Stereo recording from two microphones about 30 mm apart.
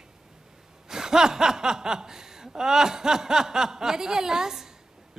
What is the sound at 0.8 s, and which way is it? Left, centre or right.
A man's voice, centre.